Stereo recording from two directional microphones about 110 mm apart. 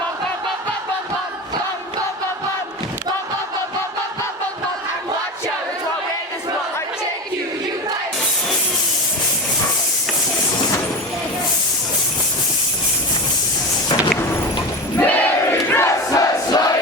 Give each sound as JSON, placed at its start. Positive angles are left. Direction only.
{"t": 14.9, "sound": "crowd", "side_deg": 15}
{"t": 15.7, "sound": "crowd", "side_deg": 25}